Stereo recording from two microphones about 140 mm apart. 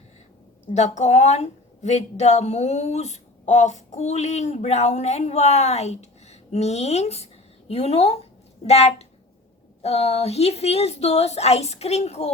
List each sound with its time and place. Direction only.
0.7 s a woman's voice: 55° left (ahead or behind)